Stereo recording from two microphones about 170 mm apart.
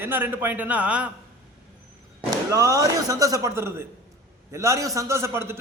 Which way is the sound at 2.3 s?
20° right (ahead or behind).